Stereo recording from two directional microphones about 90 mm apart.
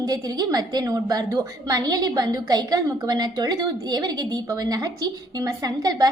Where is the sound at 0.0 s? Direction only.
45° right (ahead or behind).